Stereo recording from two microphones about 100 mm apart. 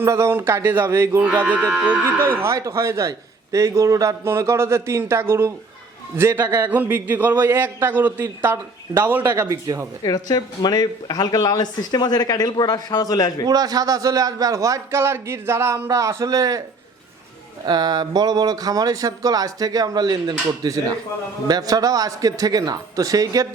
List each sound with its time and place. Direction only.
0.0 s a man's voice: 25° right (ahead or behind)
2.4 s a man's voice: 30° right (ahead or behind)
10.0 s speech: 40° left (ahead or behind)
13.5 s speech: 40° right (ahead or behind)
17.7 s speech: 40° right (ahead or behind)